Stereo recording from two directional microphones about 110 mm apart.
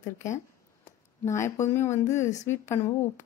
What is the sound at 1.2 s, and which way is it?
Speech, 25° left (ahead or behind).